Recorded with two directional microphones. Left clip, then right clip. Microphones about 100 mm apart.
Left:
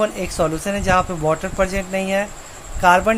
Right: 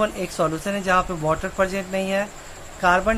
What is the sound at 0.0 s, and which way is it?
Speech, 10° left (ahead or behind).